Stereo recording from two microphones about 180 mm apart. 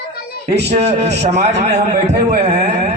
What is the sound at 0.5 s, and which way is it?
A man's voice, 35° right (ahead or behind).